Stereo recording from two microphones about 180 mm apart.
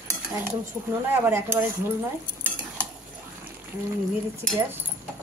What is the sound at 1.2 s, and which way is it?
Speech, 15° right (ahead or behind).